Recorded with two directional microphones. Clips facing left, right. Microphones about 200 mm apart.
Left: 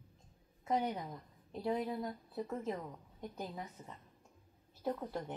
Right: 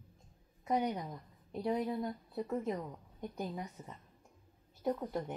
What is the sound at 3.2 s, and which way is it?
Speech, 15° right (ahead or behind).